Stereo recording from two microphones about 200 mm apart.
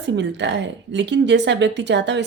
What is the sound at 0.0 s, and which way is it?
Speech, 60° right (ahead or behind).